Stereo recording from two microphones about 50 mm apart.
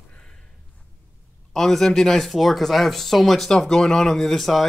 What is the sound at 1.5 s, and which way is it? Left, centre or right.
Speech, centre.